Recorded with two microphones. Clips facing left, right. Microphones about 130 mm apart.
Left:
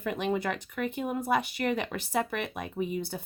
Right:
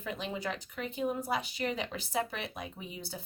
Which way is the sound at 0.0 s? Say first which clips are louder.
Left 7 dB; 60° left (ahead or behind).